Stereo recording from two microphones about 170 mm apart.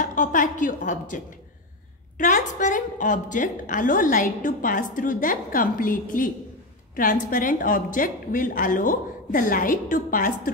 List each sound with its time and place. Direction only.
0.0 s a woman's voice: 50° left (ahead or behind)